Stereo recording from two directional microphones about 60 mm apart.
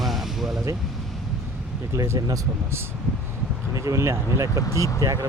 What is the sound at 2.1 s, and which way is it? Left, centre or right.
Speech, right.